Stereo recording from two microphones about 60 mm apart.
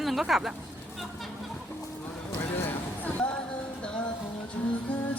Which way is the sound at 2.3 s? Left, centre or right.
Left.